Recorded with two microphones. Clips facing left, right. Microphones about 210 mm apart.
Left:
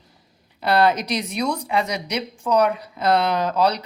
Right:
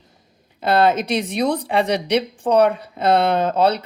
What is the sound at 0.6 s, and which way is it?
A woman's voice, 25° right (ahead or behind).